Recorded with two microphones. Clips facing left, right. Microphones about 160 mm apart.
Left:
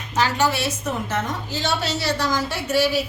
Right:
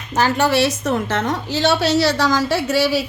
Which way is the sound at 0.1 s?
60° right (ahead or behind).